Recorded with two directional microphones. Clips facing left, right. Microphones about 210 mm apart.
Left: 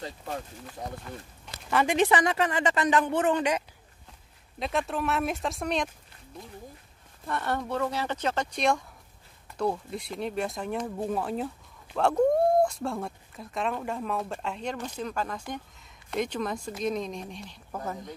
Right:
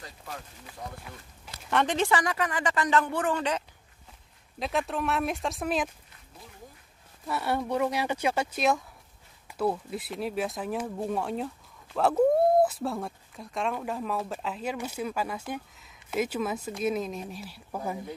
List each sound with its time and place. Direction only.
1.0 s speech: centre (ahead or behind)
2.0 s speech: 20° left (ahead or behind)
4.6 s speech: centre (ahead or behind)
7.2 s speech: 10° right (ahead or behind)